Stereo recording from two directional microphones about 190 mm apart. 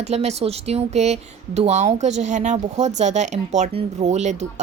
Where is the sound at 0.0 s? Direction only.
35° right (ahead or behind).